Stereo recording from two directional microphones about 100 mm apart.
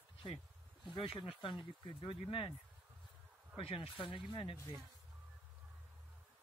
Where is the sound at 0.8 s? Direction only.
55° left (ahead or behind).